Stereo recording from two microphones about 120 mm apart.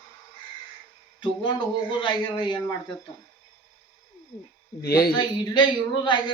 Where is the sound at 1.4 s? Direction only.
40° left (ahead or behind).